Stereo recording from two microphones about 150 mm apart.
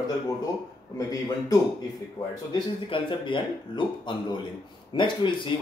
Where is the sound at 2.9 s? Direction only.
35° left (ahead or behind).